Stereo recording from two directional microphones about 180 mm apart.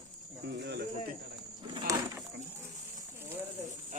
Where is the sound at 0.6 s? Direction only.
70° right (ahead or behind).